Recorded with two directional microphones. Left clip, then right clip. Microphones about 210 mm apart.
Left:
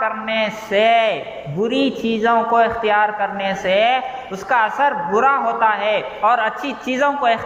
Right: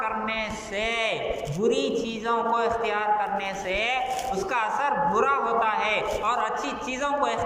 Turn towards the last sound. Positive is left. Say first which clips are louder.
# left 9 dB
turn(degrees=40)  # may be behind; listen again after turning